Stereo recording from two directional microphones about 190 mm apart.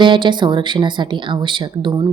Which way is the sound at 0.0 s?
25° right (ahead or behind).